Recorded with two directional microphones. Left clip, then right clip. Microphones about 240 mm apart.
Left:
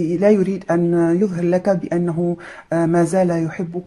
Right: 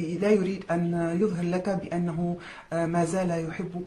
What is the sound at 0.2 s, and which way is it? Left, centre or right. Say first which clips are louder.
Speech: left 7 dB; left.